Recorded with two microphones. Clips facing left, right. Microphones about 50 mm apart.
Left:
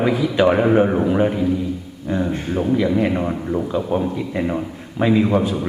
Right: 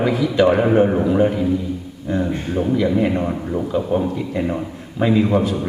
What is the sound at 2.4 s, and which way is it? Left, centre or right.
A man's voice, centre.